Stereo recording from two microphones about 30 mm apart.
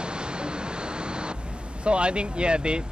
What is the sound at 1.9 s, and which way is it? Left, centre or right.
Speech, right.